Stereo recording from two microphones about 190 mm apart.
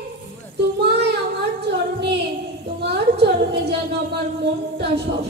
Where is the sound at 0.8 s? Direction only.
60° right (ahead or behind).